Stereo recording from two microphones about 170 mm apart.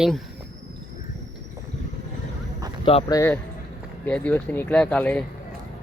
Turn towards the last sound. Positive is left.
turn(degrees=5)  # may be behind; listen again after turning